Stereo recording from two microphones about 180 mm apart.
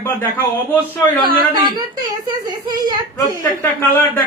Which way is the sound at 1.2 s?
25° right (ahead or behind).